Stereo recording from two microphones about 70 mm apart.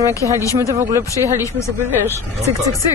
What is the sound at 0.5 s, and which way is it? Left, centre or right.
Speech, right.